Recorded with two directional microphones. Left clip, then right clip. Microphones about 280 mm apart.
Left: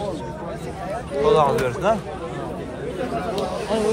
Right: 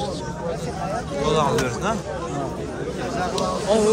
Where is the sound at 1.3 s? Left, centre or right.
Centre.